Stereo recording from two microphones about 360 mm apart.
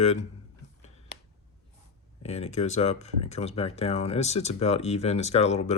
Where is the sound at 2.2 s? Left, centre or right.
Centre.